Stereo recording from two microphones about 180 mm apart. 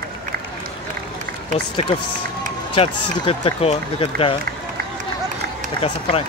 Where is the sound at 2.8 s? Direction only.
30° left (ahead or behind).